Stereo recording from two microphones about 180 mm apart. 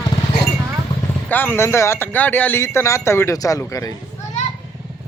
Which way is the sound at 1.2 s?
10° left (ahead or behind).